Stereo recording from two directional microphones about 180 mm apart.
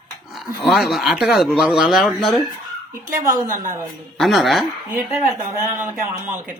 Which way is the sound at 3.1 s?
50° right (ahead or behind).